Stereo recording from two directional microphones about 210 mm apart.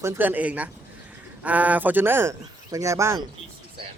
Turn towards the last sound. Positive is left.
turn(degrees=-15)  # may be behind; listen again after turning